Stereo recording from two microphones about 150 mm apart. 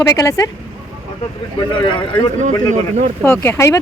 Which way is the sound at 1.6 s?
35° left (ahead or behind).